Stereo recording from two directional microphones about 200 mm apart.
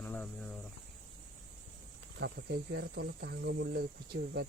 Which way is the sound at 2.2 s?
55° right (ahead or behind).